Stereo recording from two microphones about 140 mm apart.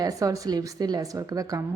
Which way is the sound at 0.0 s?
25° right (ahead or behind).